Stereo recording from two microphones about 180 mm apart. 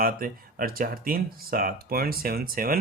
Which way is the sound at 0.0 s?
55° right (ahead or behind).